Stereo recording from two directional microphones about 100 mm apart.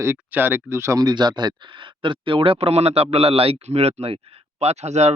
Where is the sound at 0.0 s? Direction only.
20° right (ahead or behind).